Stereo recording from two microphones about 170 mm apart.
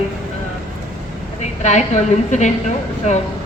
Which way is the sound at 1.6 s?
45° left (ahead or behind).